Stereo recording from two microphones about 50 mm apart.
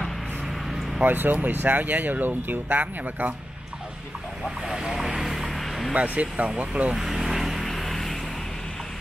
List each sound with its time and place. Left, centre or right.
1.0 s speech: right
4.6 s vehicle: centre
5.9 s speech: right
7.0 s vehicle: centre